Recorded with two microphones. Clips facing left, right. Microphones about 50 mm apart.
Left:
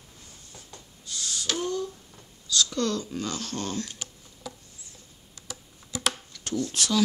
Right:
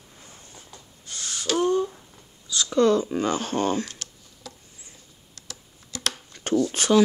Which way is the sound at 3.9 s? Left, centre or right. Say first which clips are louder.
Even; centre.